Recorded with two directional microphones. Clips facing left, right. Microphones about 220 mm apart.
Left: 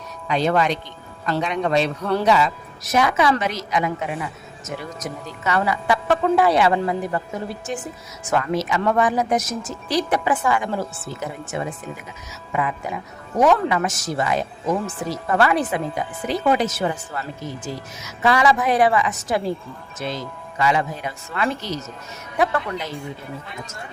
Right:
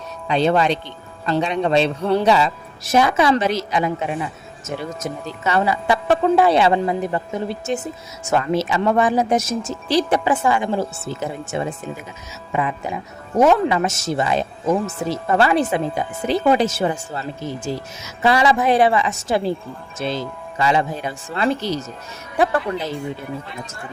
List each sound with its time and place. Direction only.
0.3 s a woman's voice: 30° right (ahead or behind)